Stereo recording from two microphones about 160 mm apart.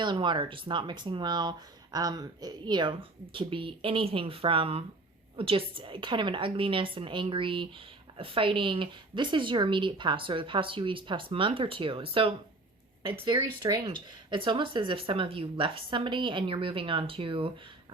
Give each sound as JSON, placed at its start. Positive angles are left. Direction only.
{"t": 0.0, "sound": "speech", "side_deg": -30}